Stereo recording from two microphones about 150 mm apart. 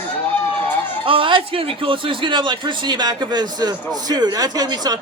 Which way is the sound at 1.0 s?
35° right (ahead or behind).